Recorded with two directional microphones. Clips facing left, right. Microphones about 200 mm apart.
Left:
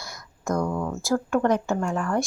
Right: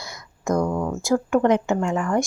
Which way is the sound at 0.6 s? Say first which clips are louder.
Right 3 dB; 20° right (ahead or behind).